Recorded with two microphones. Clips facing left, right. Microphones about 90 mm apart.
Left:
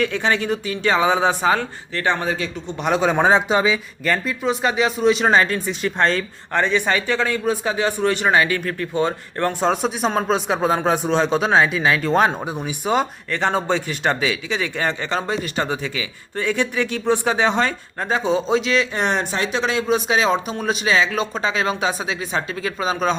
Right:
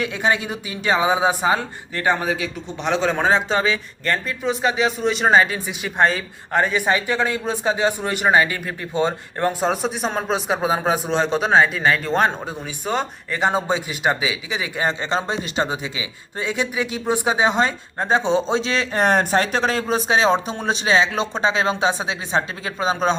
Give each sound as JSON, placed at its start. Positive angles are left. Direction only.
{"t": 0.0, "sound": "speech", "side_deg": -15}
{"t": 2.8, "sound": "speech", "side_deg": 10}
{"t": 9.5, "sound": "speech", "side_deg": -5}
{"t": 12.5, "sound": "speech", "side_deg": 15}
{"t": 13.3, "sound": "a man's voice", "side_deg": -15}